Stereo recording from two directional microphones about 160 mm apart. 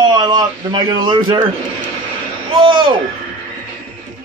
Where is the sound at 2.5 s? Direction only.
30° right (ahead or behind).